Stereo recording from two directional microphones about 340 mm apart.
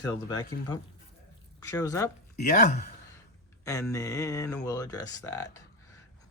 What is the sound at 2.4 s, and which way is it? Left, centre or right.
Speech, left.